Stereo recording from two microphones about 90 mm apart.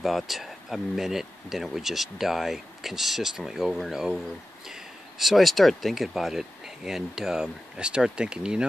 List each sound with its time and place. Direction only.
0.0 s speech: centre (ahead or behind)